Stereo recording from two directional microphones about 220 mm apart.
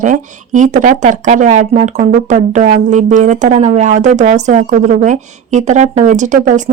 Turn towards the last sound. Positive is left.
turn(degrees=-35)  # may be behind; listen again after turning